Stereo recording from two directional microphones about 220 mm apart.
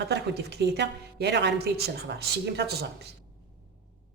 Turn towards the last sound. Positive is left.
turn(degrees=-50)  # may be behind; listen again after turning